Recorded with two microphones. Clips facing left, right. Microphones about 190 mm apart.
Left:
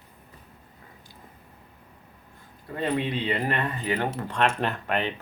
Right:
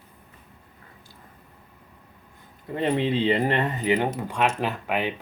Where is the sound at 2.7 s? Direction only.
25° right (ahead or behind).